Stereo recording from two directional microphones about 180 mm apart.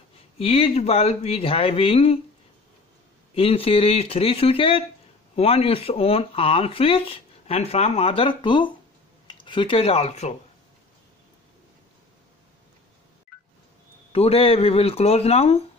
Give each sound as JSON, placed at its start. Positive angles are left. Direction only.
{"t": 0.4, "sound": "speech", "side_deg": 35}
{"t": 3.3, "sound": "speech", "side_deg": 30}
{"t": 14.1, "sound": "speech", "side_deg": 35}